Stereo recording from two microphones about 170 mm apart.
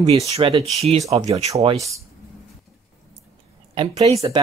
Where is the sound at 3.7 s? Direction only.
35° right (ahead or behind).